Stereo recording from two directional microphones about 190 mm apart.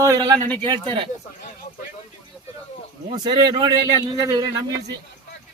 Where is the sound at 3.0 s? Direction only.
20° right (ahead or behind).